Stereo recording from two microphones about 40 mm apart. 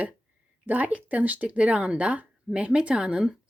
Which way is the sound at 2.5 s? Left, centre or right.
Centre.